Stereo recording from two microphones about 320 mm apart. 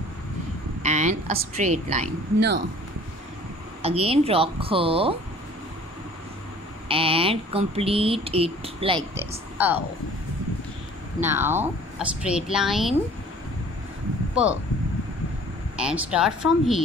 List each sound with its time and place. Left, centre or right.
0.8 s a woman's voice: right
3.8 s speech: centre
6.9 s speech: centre
11.1 s a woman's voice: centre
14.3 s speech: centre
15.7 s a woman's voice: centre